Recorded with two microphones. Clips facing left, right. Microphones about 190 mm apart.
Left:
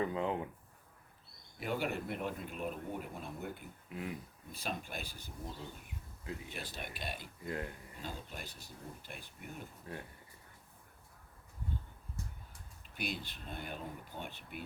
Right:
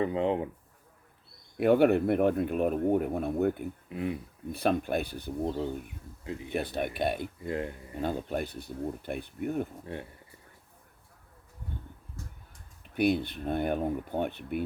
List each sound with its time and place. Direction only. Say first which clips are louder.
0.0 s speech: right 7 dB; 30° right (ahead or behind)
1.5 s speech: right 15 dB; 60° right (ahead or behind)
3.8 s speech: right 8 dB; 25° right (ahead or behind)
4.5 s speech: right 14 dB; 60° right (ahead or behind)
7.4 s speech: right 6 dB; 25° right (ahead or behind)
8.0 s speech: right 15 dB; 60° right (ahead or behind)
9.8 s speech: right 7 dB; 25° right (ahead or behind)
12.9 s speech: right 15 dB; 55° right (ahead or behind)